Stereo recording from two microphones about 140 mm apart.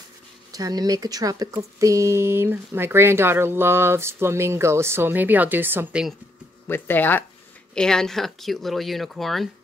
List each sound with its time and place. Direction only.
0.5 s speech: 25° right (ahead or behind)
6.7 s speech: 15° left (ahead or behind)